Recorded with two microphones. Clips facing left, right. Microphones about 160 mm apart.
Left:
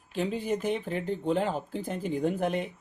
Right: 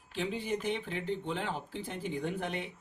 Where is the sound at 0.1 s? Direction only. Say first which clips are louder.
Left 5 dB; 45° left (ahead or behind).